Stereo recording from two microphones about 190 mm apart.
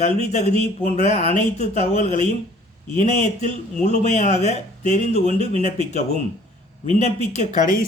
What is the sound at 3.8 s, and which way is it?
A man's voice, 35° left (ahead or behind).